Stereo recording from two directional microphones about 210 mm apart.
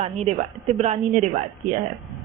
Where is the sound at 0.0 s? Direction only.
30° right (ahead or behind).